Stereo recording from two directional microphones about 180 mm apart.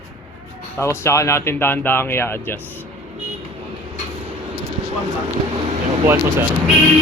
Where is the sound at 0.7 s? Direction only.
15° left (ahead or behind).